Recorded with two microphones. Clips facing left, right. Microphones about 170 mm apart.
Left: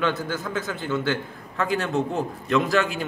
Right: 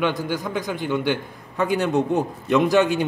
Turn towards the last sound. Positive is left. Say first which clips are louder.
# right 5 dB
turn(degrees=-20)  # may be behind; listen again after turning